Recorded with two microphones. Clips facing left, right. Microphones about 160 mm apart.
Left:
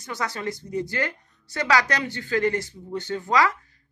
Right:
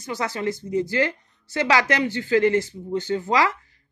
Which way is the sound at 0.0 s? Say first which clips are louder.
Right 4 dB; 20° right (ahead or behind).